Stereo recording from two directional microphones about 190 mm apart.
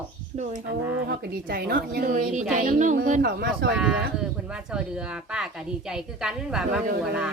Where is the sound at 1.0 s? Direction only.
55° right (ahead or behind).